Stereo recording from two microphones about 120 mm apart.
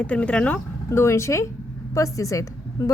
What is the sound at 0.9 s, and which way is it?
Speech, 25° left (ahead or behind).